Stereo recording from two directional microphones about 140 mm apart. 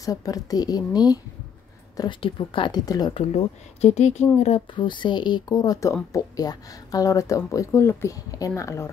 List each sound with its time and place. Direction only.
0.0 s a woman's voice: 25° left (ahead or behind)
3.8 s speech: 55° left (ahead or behind)
4.7 s a woman's voice: 35° left (ahead or behind)